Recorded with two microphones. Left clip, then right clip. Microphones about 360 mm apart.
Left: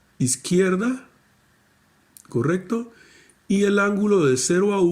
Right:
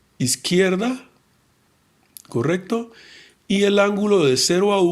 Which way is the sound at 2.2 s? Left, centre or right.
Centre.